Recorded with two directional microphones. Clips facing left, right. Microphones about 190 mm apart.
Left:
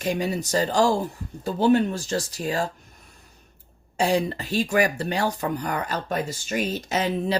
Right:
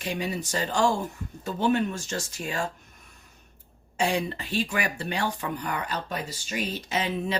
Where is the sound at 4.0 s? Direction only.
40° left (ahead or behind).